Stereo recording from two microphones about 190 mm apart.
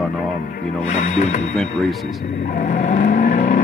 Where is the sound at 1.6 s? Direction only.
Centre (ahead or behind).